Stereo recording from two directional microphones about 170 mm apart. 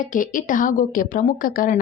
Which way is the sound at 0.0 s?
50° left (ahead or behind).